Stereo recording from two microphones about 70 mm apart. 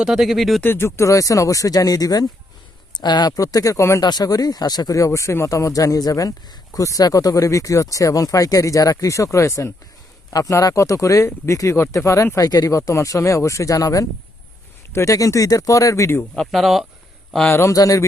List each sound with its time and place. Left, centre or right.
0.0 s speech: centre
0.6 s speech: left
0.9 s speech: left
3.0 s speech: left
4.0 s speech: left
4.9 s speech: left
10.3 s speech: left
16.3 s speech: centre
17.5 s speech: left
17.7 s speech: left